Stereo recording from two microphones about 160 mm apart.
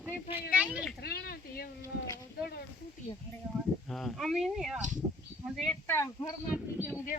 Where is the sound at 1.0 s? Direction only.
75° left (ahead or behind).